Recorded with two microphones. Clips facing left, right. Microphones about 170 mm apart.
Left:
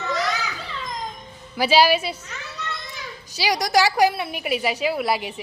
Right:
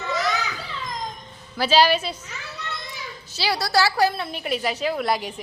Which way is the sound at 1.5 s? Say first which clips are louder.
Left 1 dB; 10° left (ahead or behind).